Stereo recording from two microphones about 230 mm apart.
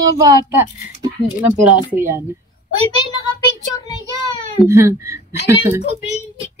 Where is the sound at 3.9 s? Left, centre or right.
Centre.